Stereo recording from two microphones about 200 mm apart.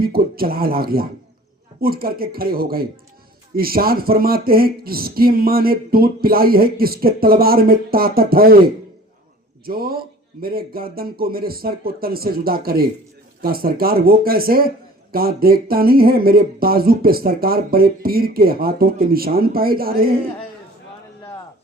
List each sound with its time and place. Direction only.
0.0 s speech: 50° right (ahead or behind)
9.6 s speech: 50° right (ahead or behind)